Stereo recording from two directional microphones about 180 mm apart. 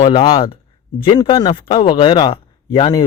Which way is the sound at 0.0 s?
30° left (ahead or behind).